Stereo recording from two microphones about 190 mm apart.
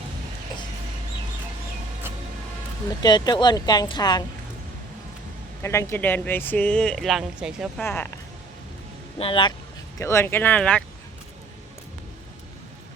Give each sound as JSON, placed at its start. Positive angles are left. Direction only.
{"t": 3.0, "sound": "a woman's voice", "side_deg": 20}
{"t": 5.6, "sound": "speech", "side_deg": 15}
{"t": 7.8, "sound": "speech", "side_deg": 10}
{"t": 9.1, "sound": "a woman's voice", "side_deg": 30}
{"t": 10.0, "sound": "speech", "side_deg": 15}